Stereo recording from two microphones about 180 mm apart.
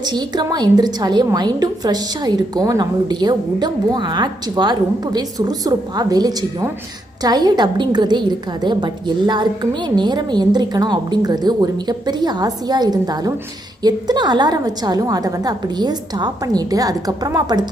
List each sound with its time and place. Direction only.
0.0 s a woman's voice: 25° right (ahead or behind)